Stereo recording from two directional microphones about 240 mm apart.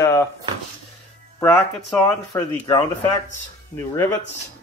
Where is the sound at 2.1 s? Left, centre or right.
Centre.